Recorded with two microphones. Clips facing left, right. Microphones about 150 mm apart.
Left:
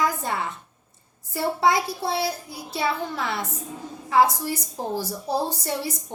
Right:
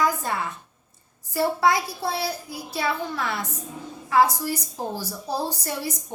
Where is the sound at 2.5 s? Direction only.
25° left (ahead or behind).